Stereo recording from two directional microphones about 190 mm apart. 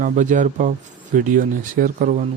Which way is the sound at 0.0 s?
40° right (ahead or behind).